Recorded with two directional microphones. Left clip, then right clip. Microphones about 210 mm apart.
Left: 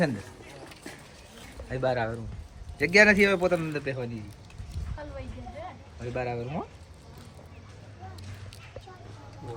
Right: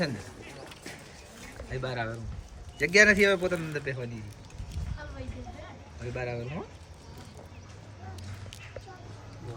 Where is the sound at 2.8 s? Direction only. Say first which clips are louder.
Left 1 dB; 25° left (ahead or behind).